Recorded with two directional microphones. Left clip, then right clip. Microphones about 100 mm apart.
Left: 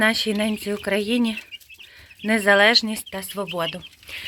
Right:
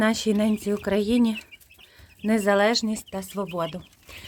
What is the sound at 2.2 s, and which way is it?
Speech, 5° right (ahead or behind).